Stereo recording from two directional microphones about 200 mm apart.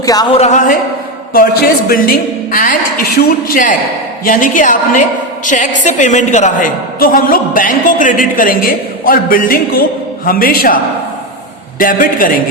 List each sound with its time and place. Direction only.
0.0 s speech: 20° left (ahead or behind)
0.3 s a woman's voice: 35° left (ahead or behind)
11.8 s a woman's voice: 45° left (ahead or behind)